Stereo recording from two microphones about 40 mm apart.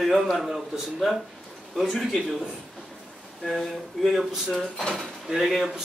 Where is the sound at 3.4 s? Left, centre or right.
Centre.